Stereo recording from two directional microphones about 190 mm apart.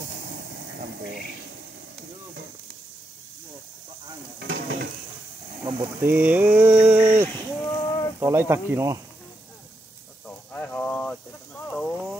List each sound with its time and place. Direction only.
0.2 s vehicle: 60° right (ahead or behind)
4.5 s dishes: 65° right (ahead or behind)
5.7 s speech: 15° right (ahead or behind)
7.6 s a sound: 20° left (ahead or behind)
8.2 s speech: 15° right (ahead or behind)
10.2 s a sound: 5° left (ahead or behind)